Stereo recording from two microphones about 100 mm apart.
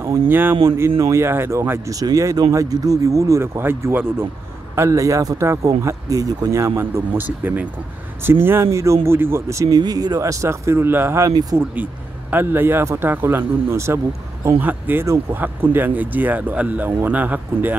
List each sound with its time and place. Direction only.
0.3 s speech: 20° right (ahead or behind)
9.8 s speech: 40° right (ahead or behind); by 17.7 s 15° right (ahead or behind)